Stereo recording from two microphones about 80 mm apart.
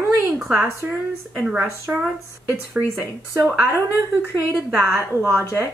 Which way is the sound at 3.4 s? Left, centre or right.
Right.